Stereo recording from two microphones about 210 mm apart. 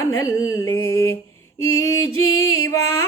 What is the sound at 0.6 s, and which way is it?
Mantra, 80° left.